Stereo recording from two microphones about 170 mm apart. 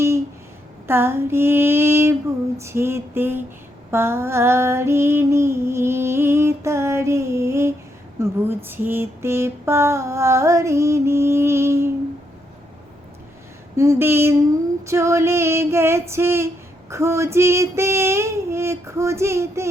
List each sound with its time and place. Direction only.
0.9 s female singing: 15° right (ahead or behind)
13.7 s female singing: 15° right (ahead or behind)